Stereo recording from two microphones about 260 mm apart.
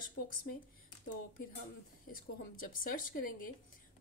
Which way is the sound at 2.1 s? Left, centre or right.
Left.